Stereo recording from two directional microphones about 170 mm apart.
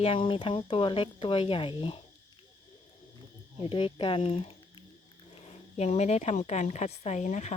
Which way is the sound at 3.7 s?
30° left (ahead or behind).